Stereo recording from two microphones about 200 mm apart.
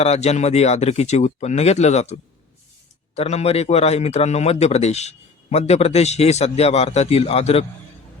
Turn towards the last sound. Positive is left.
turn(degrees=30)  # may be behind; listen again after turning